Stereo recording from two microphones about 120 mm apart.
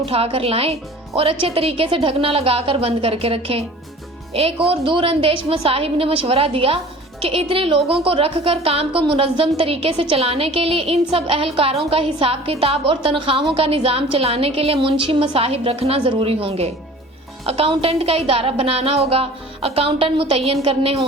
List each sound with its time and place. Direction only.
0.0 s speech: 55° right (ahead or behind)